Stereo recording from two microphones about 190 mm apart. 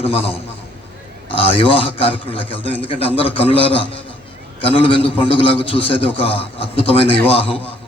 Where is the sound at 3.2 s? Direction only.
30° left (ahead or behind).